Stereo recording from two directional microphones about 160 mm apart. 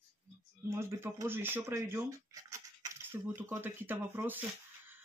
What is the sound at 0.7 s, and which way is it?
Speech, 15° right (ahead or behind).